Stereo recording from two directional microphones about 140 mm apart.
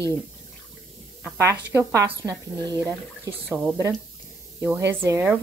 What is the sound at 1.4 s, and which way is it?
A woman's voice, 20° right (ahead or behind).